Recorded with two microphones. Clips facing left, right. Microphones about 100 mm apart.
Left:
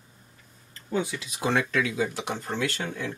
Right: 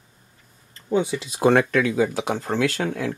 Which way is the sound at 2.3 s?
90° right.